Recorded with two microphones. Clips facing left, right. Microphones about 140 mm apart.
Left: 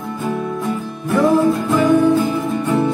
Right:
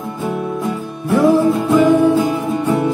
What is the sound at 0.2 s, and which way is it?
Music, 15° right (ahead or behind).